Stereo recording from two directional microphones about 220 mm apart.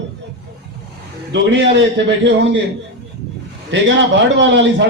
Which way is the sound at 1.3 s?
55° right (ahead or behind).